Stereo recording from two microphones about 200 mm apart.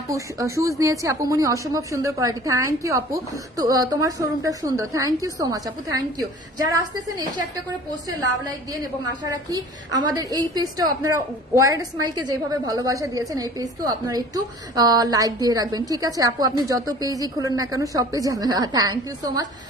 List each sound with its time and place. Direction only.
0.1 s a woman's voice: 15° right (ahead or behind)
9.2 s a woman's voice: 20° right (ahead or behind)